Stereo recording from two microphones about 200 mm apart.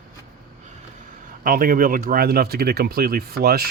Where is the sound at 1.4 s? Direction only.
45° right (ahead or behind).